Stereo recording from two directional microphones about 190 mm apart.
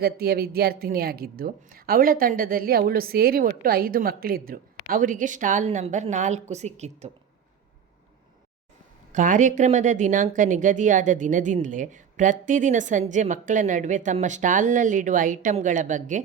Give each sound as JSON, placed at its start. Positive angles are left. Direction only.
{"t": 0.0, "sound": "speech", "side_deg": -55}
{"t": 9.1, "sound": "speech", "side_deg": -40}